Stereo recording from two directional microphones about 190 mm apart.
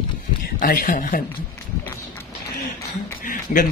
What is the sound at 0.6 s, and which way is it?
Speech, 50° left (ahead or behind).